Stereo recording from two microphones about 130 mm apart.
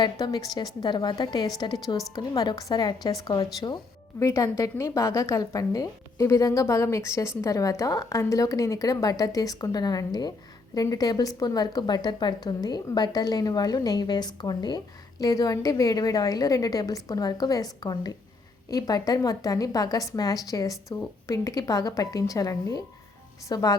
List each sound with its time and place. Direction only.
0.0 s a woman's voice: 30° left (ahead or behind)